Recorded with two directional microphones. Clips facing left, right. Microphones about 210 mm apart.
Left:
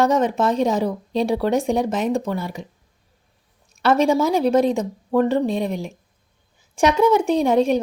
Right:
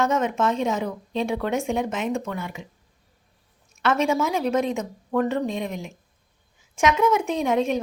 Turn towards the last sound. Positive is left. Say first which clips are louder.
# left 5 dB
turn(degrees=35)  # may be behind; listen again after turning